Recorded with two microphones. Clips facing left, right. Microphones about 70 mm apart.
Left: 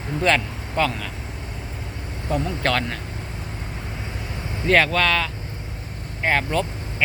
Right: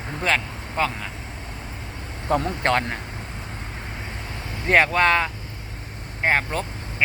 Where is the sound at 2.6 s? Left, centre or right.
Right.